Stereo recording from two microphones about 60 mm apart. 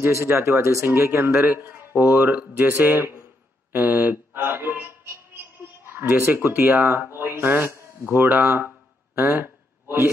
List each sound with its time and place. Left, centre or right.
0.1 s speech: right
2.1 s mantra: right
3.7 s speech: right
9.1 s a sound: right